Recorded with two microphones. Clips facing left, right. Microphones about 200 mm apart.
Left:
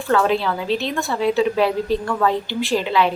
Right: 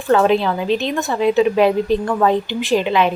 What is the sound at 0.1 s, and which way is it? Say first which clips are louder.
A woman's voice: right 4 dB; 20° right (ahead or behind).